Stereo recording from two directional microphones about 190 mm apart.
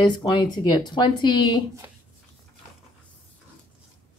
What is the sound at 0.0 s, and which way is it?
Speech, 25° left (ahead or behind).